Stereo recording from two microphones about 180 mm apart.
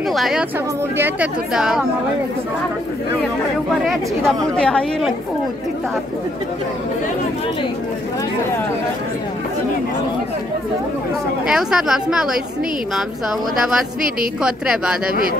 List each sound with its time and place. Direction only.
0.1 s a woman's voice: centre (ahead or behind)
3.8 s a woman's voice: centre (ahead or behind)
11.4 s a woman's voice: 5° right (ahead or behind)
13.6 s a woman's voice: 5° right (ahead or behind)